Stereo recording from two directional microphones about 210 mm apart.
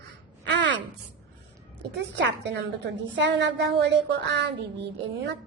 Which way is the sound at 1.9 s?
55° right (ahead or behind).